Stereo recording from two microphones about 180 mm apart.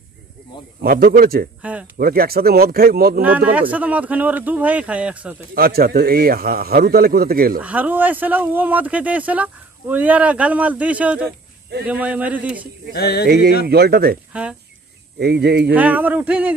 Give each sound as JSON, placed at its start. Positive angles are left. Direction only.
{"t": 0.8, "sound": "a man's voice", "side_deg": -55}
{"t": 1.6, "sound": "speech", "side_deg": -5}
{"t": 2.0, "sound": "a man's voice", "side_deg": -55}
{"t": 3.2, "sound": "speech", "side_deg": -10}
{"t": 5.5, "sound": "a man's voice", "side_deg": -55}
{"t": 7.5, "sound": "speech", "side_deg": -10}
{"t": 12.9, "sound": "a sound", "side_deg": 60}
{"t": 13.7, "sound": "a man's voice", "side_deg": -60}
{"t": 14.3, "sound": "speech", "side_deg": -5}
{"t": 15.1, "sound": "speech", "side_deg": -65}
{"t": 15.7, "sound": "speech", "side_deg": -10}